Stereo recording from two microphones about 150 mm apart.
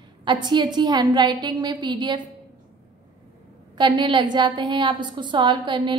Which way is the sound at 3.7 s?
30° right (ahead or behind).